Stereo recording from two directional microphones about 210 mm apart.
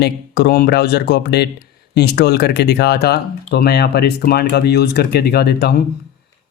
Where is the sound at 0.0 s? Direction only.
50° left (ahead or behind).